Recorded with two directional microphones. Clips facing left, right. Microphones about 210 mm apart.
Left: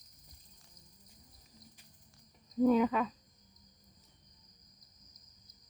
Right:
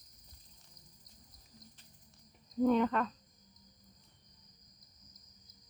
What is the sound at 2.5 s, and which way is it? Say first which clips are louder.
Speech: left 2 dB; 5° left (ahead or behind).